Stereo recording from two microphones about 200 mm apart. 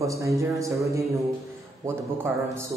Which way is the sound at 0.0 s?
15° right (ahead or behind).